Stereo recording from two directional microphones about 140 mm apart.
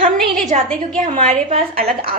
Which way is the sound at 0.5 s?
50° right (ahead or behind).